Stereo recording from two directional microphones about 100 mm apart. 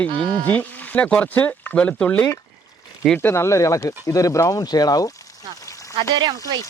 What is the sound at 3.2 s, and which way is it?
Speech, 25° left (ahead or behind).